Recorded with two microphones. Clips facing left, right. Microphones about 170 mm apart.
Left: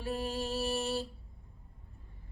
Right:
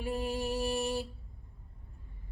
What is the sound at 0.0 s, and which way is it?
Music, 15° right (ahead or behind).